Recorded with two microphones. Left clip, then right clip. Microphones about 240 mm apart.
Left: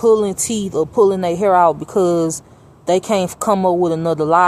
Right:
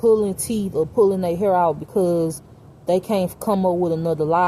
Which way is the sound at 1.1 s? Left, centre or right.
Left.